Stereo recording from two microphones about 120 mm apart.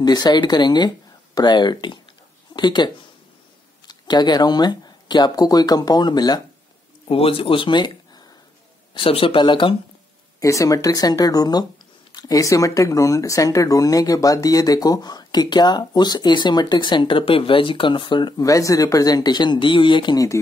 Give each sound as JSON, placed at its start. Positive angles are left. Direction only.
{"t": 0.0, "sound": "speech", "side_deg": 35}
{"t": 7.1, "sound": "speech", "side_deg": 50}
{"t": 8.9, "sound": "speech", "side_deg": 50}
{"t": 10.4, "sound": "speech", "side_deg": 25}
{"t": 18.5, "sound": "speech", "side_deg": 30}